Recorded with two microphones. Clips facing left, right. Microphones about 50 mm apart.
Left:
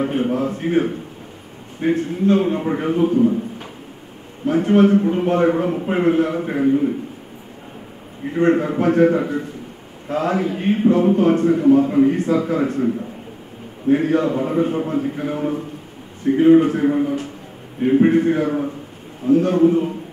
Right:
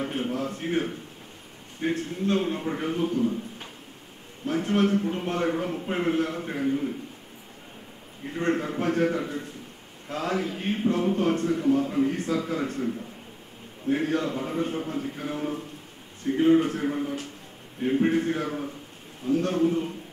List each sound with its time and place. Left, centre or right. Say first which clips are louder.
0.0 s a man's voice: left 9 dB; centre
4.5 s a man's voice: left 10 dB; centre
8.4 s a man's voice: left 10 dB; centre
11.5 s a man's voice: left 10 dB; left
12.1 s a man's voice: left 9 dB; centre
13.8 s a man's voice: left 9 dB; centre